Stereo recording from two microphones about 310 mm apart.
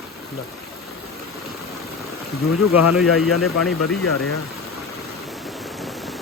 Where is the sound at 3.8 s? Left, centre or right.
Left.